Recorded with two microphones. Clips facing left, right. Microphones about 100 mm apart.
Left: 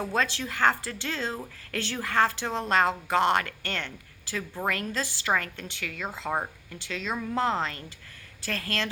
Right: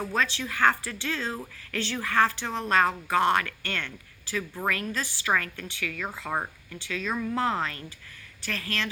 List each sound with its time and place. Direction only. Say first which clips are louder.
0.1 s speech: even; 35° left (ahead or behind)
8.4 s speech: left 1 dB; 40° left (ahead or behind)